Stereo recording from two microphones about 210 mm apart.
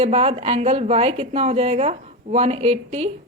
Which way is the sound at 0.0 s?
30° right (ahead or behind).